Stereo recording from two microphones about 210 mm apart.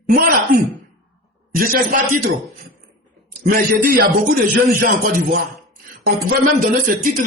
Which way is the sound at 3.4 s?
45° right (ahead or behind).